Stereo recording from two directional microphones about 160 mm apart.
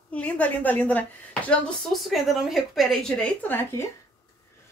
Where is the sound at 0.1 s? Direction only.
10° left (ahead or behind).